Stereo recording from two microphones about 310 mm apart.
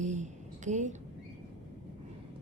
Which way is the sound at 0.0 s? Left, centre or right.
Right.